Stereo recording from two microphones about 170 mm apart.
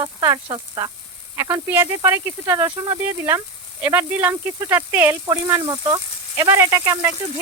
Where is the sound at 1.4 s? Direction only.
15° right (ahead or behind).